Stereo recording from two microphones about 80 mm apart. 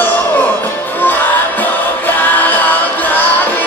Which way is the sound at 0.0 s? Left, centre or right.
Left.